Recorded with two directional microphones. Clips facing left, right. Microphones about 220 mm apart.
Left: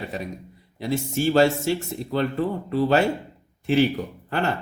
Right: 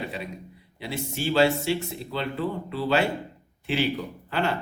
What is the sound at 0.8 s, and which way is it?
Speech, 45° left (ahead or behind).